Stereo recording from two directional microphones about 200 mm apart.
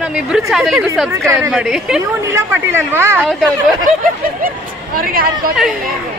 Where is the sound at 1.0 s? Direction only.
15° right (ahead or behind).